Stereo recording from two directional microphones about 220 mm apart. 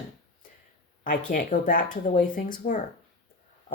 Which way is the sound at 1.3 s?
35° left (ahead or behind).